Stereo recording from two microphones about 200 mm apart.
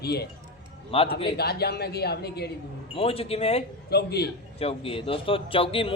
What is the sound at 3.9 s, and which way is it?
Speech, 55° left (ahead or behind).